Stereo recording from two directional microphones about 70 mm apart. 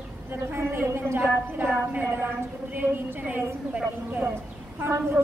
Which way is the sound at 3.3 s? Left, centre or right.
Right.